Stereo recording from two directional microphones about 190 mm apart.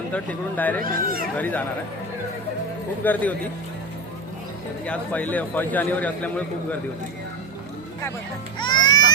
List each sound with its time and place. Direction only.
0.1 s a man's voice: 10° left (ahead or behind)
0.9 s speech: 50° right (ahead or behind)
1.4 s a man's voice: 10° left (ahead or behind)
3.0 s a man's voice: 10° left (ahead or behind)
4.9 s a man's voice: 10° left (ahead or behind)
8.5 s music: 25° left (ahead or behind)